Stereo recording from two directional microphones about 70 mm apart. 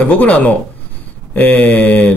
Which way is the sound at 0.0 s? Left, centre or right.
Centre.